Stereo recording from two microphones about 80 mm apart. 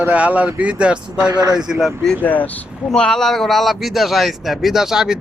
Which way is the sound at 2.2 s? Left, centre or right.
Left.